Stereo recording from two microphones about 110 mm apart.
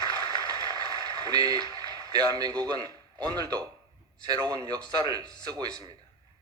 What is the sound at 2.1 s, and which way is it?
A man's voice, 35° right (ahead or behind).